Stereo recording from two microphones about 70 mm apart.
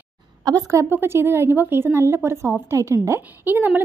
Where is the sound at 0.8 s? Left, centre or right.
Right.